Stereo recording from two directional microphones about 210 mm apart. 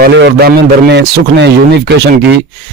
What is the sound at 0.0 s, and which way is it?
A man's voice, 55° right (ahead or behind).